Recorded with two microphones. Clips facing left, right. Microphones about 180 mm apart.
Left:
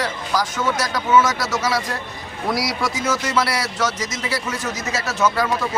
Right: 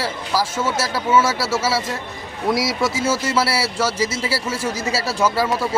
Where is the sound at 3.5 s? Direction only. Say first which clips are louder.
Right 2 dB; 5° right (ahead or behind).